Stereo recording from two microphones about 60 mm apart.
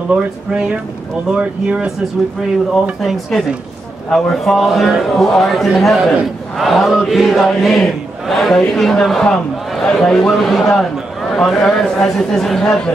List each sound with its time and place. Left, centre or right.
1.4 s speech: centre
2.7 s chant: centre
4.1 s a man's voice: centre
4.6 s chant: centre
8.5 s a man's voice: centre
10.3 s chant: centre
11.3 s a man's voice: centre